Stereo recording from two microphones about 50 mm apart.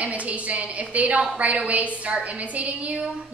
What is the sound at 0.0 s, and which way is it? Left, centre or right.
A woman's voice, right.